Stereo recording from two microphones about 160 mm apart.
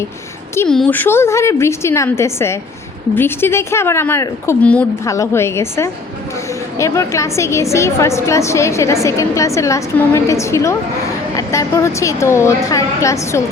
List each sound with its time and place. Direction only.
0.7 s a woman's voice: 5° left (ahead or behind)
5.0 s a woman's voice: 20° left (ahead or behind)